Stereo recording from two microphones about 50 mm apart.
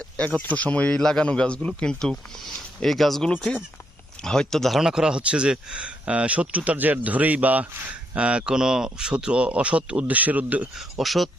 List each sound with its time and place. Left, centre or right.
0.3 s speech: left
0.9 s speech: centre
1.2 s speech: left
2.4 s speech: centre
4.8 s speech: centre; by 10.7 s right
10.8 s speech: centre